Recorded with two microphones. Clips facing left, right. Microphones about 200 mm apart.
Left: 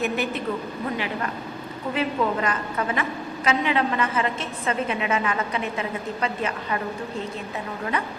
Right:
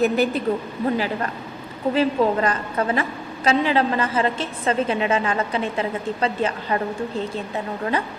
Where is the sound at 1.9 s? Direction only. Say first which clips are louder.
Right 5 dB; 35° right (ahead or behind).